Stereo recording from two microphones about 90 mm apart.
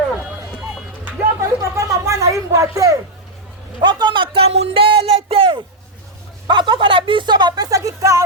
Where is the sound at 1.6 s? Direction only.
35° right (ahead or behind).